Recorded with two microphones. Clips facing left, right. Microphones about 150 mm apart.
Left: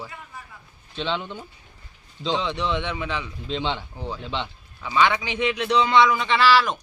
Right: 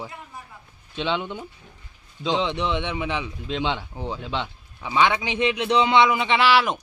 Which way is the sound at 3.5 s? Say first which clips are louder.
Right 1 dB; 5° right (ahead or behind).